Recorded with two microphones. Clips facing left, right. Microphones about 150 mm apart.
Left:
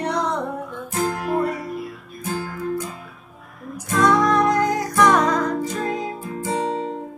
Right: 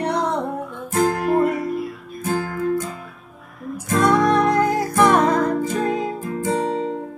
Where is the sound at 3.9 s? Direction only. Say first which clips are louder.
Right 1 dB; 55° right (ahead or behind).